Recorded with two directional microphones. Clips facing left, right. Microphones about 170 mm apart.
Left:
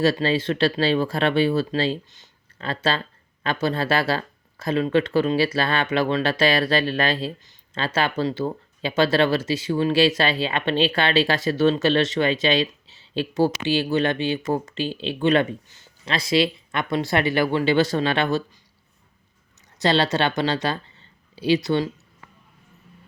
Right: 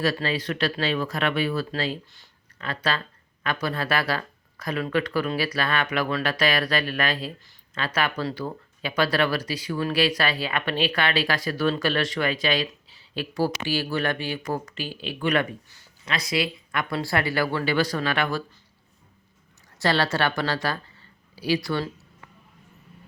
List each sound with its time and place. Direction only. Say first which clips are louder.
0.0 s speech: left 5 dB; 25° left (ahead or behind)
19.8 s speech: left 3 dB; 20° left (ahead or behind)